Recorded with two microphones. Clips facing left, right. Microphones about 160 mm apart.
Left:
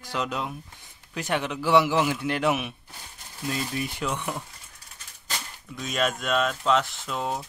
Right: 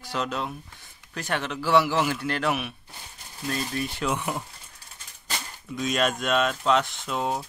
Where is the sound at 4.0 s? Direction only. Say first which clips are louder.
Right 4 dB; 5° right (ahead or behind).